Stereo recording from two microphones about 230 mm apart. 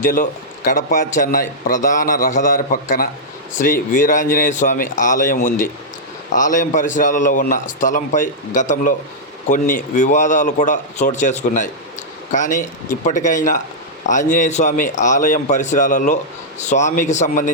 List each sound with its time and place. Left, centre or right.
0.0 s a man's voice: left